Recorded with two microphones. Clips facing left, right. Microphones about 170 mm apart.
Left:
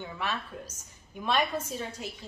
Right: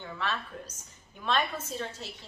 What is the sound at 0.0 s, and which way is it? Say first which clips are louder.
A woman's voice: even; 10° left (ahead or behind).